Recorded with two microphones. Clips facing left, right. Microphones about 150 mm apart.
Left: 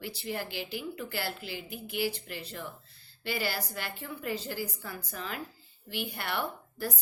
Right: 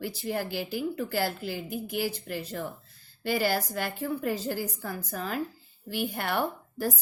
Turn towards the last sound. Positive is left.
turn(degrees=-45)  # may be behind; listen again after turning